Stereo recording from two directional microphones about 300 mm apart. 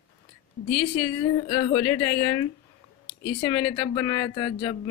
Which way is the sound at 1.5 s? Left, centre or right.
Centre.